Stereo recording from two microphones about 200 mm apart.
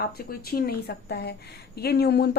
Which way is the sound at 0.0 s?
50° left (ahead or behind).